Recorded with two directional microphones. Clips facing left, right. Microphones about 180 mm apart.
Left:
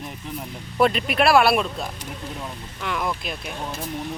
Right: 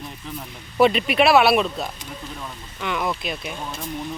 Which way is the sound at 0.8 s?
Centre (ahead or behind).